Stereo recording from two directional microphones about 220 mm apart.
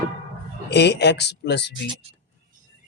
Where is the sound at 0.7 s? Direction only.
50° left (ahead or behind).